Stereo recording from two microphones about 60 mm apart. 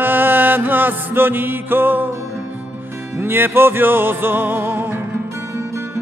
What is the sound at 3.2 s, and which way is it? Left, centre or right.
Music, right.